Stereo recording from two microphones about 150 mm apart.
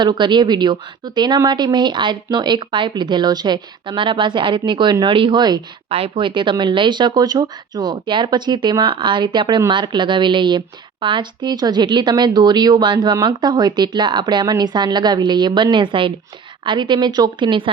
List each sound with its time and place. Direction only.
0.0 s speech: 30° right (ahead or behind)